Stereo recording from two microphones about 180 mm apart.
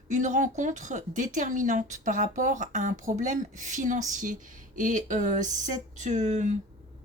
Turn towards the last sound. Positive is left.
turn(degrees=-40)  # may be behind; listen again after turning